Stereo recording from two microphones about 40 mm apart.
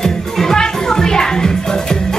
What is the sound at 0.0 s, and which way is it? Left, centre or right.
Music, centre.